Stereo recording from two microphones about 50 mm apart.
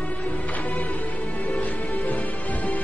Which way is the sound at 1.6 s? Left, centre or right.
Left.